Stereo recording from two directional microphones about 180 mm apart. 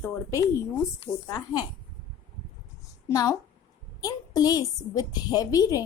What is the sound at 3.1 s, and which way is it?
A woman's voice, 20° left (ahead or behind).